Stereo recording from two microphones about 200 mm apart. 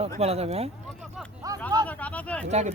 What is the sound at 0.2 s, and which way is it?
Speech, 30° right (ahead or behind).